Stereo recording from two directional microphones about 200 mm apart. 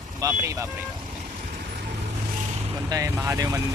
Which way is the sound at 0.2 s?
15° right (ahead or behind).